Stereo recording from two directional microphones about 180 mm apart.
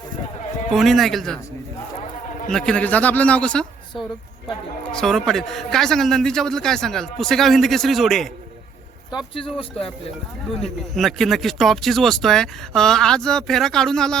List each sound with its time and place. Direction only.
0.7 s speech: centre (ahead or behind)
2.5 s a woman's voice: 5° left (ahead or behind)
9.0 s speech: 25° left (ahead or behind)
10.6 s speech: centre (ahead or behind)